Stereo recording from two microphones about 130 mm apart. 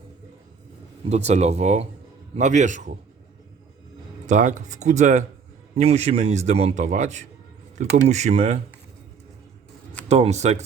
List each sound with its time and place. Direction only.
1.1 s a man's voice: 55° right (ahead or behind)
4.3 s speech: 75° right (ahead or behind)
5.7 s a man's voice: 55° right (ahead or behind)
10.1 s a man's voice: 55° right (ahead or behind)